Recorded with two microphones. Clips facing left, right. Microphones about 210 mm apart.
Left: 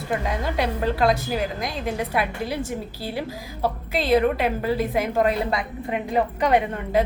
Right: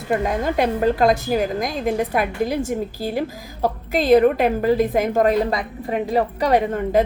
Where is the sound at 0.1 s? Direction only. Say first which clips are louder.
Right 6 dB; 50° right (ahead or behind).